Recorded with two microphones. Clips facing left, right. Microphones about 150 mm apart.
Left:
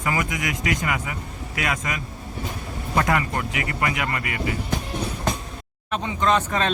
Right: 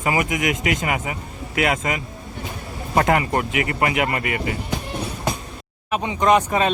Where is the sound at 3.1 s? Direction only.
25° right (ahead or behind).